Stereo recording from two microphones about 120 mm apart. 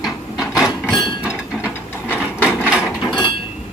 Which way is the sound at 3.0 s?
40° left (ahead or behind).